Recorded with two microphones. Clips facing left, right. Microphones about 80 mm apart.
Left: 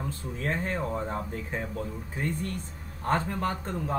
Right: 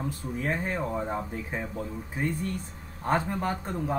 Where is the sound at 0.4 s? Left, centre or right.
Centre.